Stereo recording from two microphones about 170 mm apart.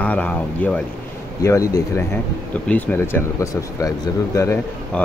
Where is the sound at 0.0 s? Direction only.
10° left (ahead or behind).